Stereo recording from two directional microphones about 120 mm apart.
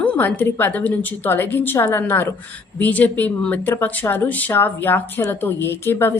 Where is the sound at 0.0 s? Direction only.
10° left (ahead or behind).